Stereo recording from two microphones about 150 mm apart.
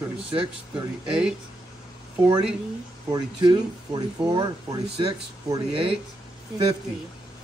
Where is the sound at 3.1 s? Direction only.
30° right (ahead or behind).